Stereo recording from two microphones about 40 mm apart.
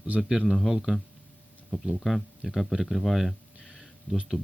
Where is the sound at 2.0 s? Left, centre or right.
Centre.